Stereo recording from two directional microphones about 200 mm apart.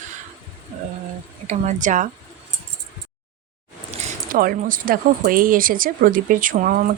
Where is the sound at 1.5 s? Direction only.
40° right (ahead or behind).